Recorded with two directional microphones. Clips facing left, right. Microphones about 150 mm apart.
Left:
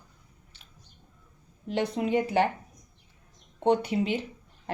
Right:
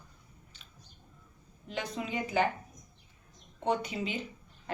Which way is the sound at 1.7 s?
65° left (ahead or behind).